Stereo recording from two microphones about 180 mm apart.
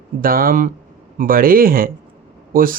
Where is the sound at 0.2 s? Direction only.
55° right (ahead or behind).